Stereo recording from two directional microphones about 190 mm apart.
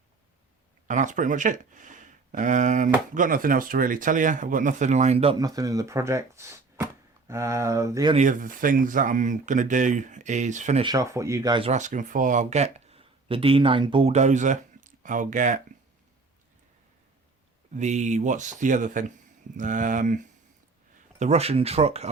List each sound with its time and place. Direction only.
0.9 s speech: 40° right (ahead or behind)
5.4 s speech: 20° right (ahead or behind)
8.1 s speech: 40° right (ahead or behind)
10.8 s speech: 15° right (ahead or behind)
11.7 s speech: 40° right (ahead or behind)
17.7 s speech: 40° right (ahead or behind)